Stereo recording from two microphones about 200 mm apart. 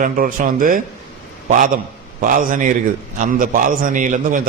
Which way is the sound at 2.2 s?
45° right (ahead or behind).